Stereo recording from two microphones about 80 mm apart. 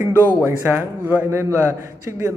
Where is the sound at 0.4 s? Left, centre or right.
Right.